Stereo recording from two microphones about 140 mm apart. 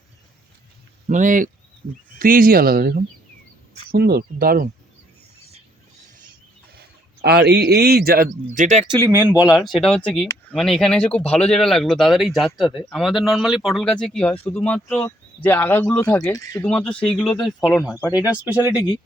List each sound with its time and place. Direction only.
1.0 s speech: 65° right (ahead or behind)
2.1 s speech: 85° right
7.9 s speech: 90° right; by 8.8 s 65° right (ahead or behind)
8.9 s speech: 25° right (ahead or behind)
9.3 s speech: 10° right (ahead or behind); by 16.6 s 25° left (ahead or behind)
16.6 s speech: 10° left (ahead or behind); by 18.9 s 10° right (ahead or behind)